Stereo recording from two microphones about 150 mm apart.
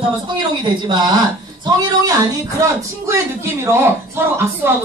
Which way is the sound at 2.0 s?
25° right (ahead or behind).